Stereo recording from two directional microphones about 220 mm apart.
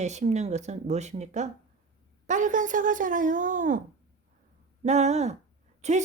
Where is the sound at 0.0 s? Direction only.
30° right (ahead or behind).